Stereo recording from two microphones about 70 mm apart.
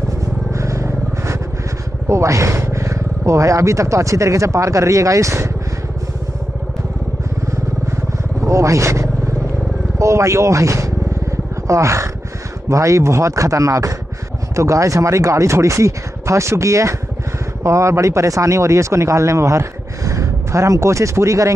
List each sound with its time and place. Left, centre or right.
0.2 s vehicle: right
2.0 s speech: right
7.8 s vehicle: right
9.9 s speech: right